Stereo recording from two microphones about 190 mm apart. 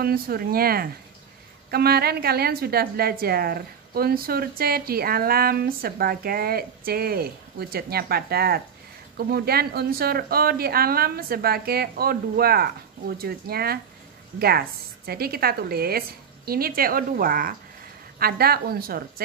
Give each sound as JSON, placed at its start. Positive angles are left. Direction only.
{"t": 0.0, "sound": "a woman's voice", "side_deg": -50}